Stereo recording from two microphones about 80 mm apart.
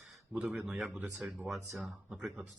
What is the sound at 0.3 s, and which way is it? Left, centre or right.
Speech, centre.